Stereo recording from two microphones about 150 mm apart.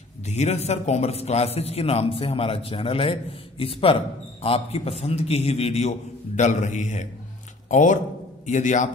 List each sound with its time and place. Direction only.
0.3 s a man's voice: 50° left (ahead or behind)